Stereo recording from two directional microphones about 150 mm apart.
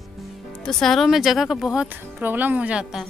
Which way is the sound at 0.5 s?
5° left (ahead or behind).